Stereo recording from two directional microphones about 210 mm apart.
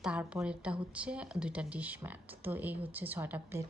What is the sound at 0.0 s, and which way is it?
Speech, 5° right (ahead or behind).